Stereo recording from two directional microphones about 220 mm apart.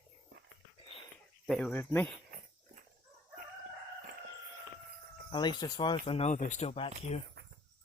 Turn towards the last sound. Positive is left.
turn(degrees=25)  # may be behind; listen again after turning